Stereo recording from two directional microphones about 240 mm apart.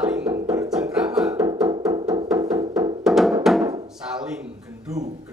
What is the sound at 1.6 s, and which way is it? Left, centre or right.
Music, centre.